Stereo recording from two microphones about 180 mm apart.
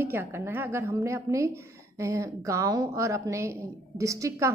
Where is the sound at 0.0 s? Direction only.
10° right (ahead or behind).